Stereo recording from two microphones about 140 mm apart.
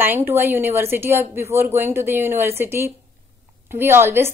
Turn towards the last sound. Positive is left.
turn(degrees=-15)  # may be behind; listen again after turning